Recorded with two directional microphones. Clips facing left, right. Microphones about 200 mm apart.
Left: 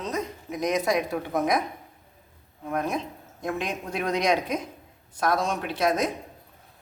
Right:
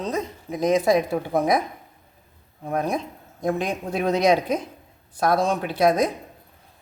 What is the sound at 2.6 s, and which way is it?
Speech, 35° right (ahead or behind).